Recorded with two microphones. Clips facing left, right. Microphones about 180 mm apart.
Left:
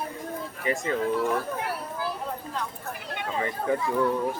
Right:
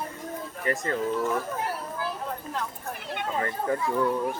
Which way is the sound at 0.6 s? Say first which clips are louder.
Left 1 dB; 10° left (ahead or behind).